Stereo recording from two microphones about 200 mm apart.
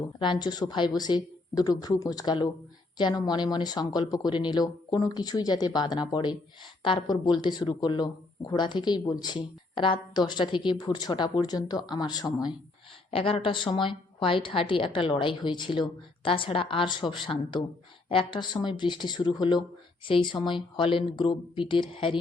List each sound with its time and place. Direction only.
0.2 s speech: 20° left (ahead or behind)